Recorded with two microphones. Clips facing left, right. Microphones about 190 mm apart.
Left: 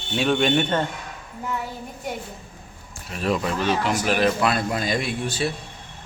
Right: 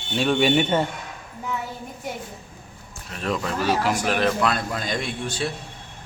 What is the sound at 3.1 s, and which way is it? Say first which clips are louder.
Speech: left 3 dB; 5° left (ahead or behind).